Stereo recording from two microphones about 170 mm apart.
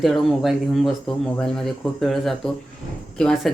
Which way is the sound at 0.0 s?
Centre (ahead or behind).